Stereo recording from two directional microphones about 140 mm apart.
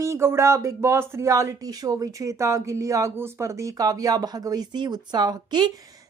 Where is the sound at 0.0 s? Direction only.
20° right (ahead or behind).